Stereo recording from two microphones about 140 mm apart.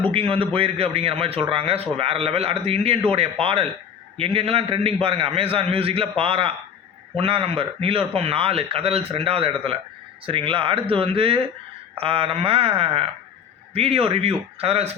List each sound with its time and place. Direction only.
0.0 s a man's voice: 40° right (ahead or behind)